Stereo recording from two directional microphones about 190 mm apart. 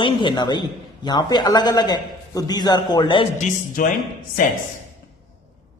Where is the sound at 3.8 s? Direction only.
45° left (ahead or behind).